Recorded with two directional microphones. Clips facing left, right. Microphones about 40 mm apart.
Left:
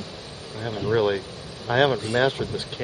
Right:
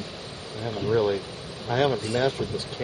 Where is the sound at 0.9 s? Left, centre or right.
Left.